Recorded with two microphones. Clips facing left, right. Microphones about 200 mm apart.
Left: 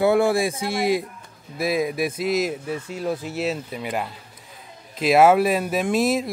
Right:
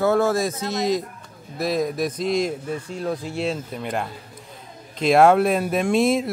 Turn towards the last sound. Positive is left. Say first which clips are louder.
# right 2 dB
turn(degrees=0)  # may be behind; listen again after turning